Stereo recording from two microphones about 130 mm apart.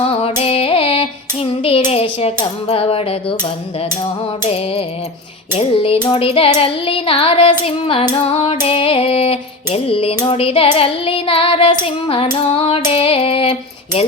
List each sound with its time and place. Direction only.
0.0 s female singing: 50° left (ahead or behind)
4.4 s female singing: 50° left (ahead or behind)